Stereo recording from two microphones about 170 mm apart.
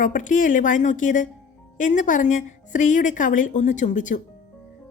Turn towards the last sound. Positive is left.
turn(degrees=50)  # may be behind; listen again after turning